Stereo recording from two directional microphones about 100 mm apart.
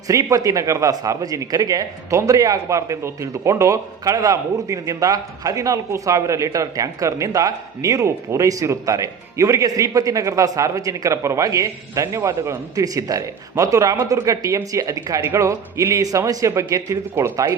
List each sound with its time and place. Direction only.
0.1 s speech: 35° right (ahead or behind)